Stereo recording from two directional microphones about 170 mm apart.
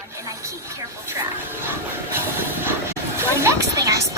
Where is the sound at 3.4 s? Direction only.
20° right (ahead or behind).